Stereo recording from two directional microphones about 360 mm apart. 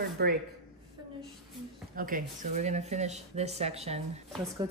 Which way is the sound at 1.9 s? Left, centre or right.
Right.